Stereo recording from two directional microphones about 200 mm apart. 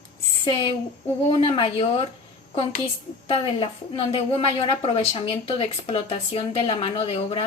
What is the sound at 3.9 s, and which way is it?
A woman's voice, 25° left (ahead or behind).